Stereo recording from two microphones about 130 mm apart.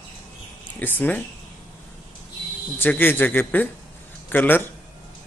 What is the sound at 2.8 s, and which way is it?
Speech, 15° left (ahead or behind).